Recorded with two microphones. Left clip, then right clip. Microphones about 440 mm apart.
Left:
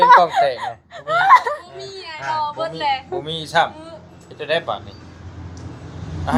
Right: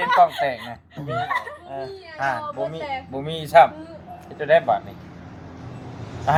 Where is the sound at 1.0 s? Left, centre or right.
Left.